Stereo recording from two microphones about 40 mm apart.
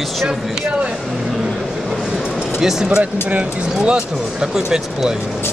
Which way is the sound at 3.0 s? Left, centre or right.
Right.